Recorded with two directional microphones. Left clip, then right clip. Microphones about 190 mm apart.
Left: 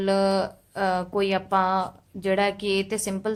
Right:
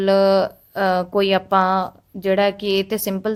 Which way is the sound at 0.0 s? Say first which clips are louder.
Right 7 dB; 40° right (ahead or behind).